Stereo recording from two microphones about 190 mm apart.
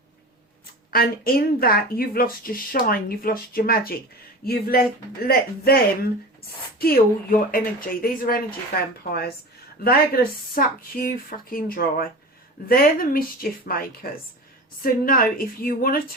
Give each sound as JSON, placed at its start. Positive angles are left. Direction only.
{"t": 0.9, "sound": "speech", "side_deg": 50}